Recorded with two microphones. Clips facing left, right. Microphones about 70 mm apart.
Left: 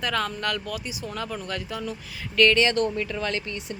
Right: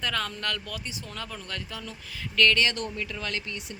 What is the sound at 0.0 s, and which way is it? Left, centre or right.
Speech, centre.